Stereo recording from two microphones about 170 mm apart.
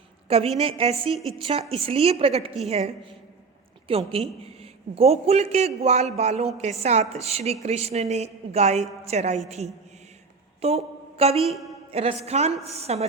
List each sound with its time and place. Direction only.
0.3 s a woman's voice: 35° right (ahead or behind)
10.6 s a woman's voice: 35° right (ahead or behind)